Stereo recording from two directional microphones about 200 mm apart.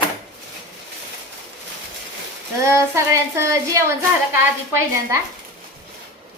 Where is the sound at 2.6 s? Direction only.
15° right (ahead or behind).